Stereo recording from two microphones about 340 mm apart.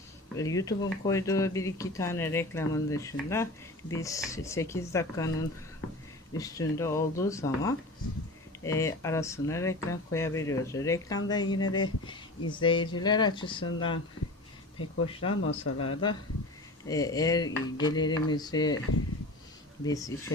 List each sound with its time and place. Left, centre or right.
0.3 s speech: centre
15.2 s speech: left
16.9 s speech: centre
19.8 s speech: centre